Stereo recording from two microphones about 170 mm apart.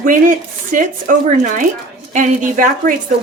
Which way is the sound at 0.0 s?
50° right (ahead or behind).